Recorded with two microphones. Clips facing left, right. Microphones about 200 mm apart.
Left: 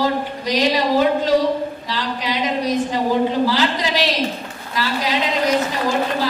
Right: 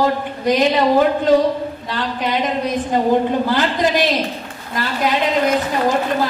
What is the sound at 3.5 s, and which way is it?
Speech, 55° right (ahead or behind).